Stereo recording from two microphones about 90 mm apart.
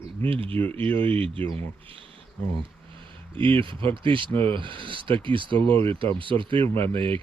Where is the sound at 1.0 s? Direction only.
80° right.